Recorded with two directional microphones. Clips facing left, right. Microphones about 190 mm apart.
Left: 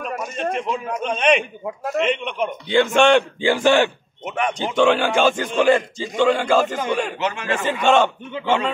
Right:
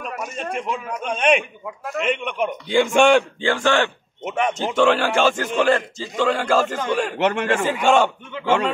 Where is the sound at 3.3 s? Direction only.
10° left (ahead or behind).